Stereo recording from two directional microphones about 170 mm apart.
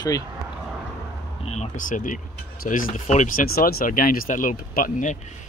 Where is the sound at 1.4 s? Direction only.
40° left (ahead or behind).